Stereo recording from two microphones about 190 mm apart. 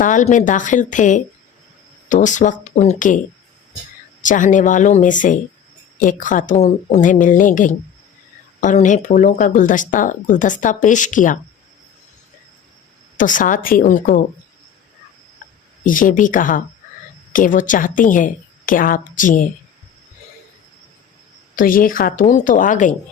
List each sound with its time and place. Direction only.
0.0 s speech: 40° left (ahead or behind)
4.2 s speech: 40° left (ahead or behind)
13.1 s speech: 45° left (ahead or behind)
15.8 s speech: 45° left (ahead or behind)
21.5 s speech: 45° left (ahead or behind)